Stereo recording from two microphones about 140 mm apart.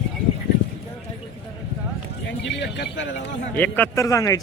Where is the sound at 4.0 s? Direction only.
25° left (ahead or behind).